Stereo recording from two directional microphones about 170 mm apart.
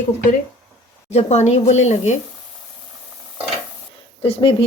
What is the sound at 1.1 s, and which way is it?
Speech, 40° left (ahead or behind).